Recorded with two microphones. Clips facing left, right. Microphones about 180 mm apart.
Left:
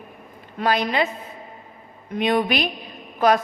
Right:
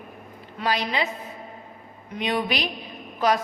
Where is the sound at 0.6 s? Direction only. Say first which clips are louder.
Left 4 dB; 55° left (ahead or behind).